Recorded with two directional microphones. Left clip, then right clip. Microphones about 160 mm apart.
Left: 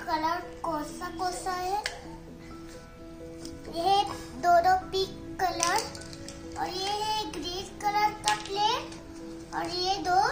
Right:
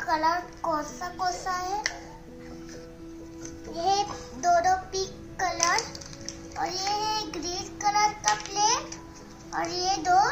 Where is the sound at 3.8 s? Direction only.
Centre (ahead or behind).